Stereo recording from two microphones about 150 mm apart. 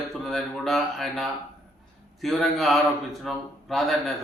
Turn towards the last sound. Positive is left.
turn(degrees=0)  # may be behind; listen again after turning